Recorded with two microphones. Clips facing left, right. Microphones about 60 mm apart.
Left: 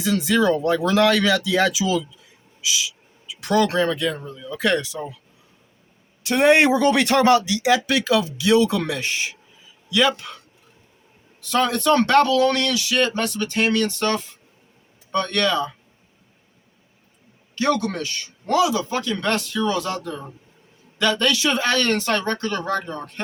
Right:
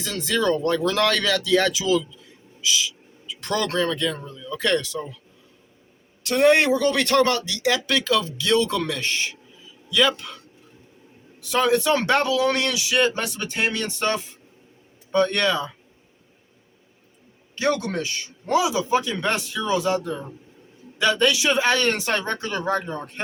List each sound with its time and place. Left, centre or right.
0.0 s speech: centre
6.2 s speech: left; by 10.3 s centre
11.3 s speech: centre
17.5 s speech: centre